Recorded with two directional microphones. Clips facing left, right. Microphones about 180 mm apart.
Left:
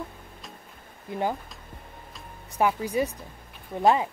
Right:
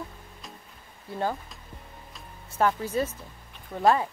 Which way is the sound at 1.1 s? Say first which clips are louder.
Left 2 dB; 15° left (ahead or behind).